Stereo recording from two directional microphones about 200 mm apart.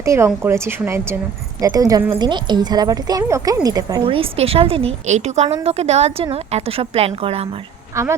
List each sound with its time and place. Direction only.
0.0 s a woman's voice: 15° right (ahead or behind)
7.9 s speech: 15° right (ahead or behind)